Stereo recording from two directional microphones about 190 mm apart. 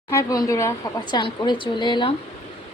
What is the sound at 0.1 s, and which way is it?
Speech, 15° left (ahead or behind).